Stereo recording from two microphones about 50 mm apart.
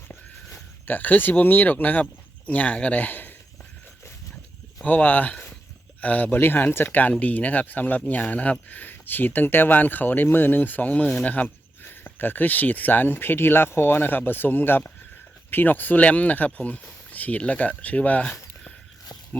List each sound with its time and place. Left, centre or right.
0.9 s speech: left
4.8 s speech: left
11.8 s speech: left